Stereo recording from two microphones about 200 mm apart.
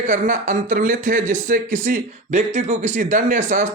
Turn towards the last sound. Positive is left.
turn(degrees=-40)  # may be behind; listen again after turning